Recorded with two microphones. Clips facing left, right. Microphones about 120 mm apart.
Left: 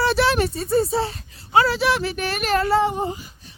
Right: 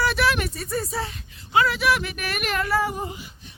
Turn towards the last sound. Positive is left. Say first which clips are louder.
# left 5 dB
turn(degrees=25)  # may be behind; listen again after turning